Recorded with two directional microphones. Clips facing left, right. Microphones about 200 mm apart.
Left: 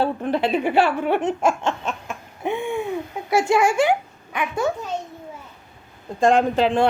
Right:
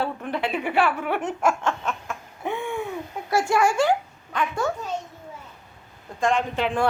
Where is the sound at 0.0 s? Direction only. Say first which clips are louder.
Left 6 dB; 30° left (ahead or behind).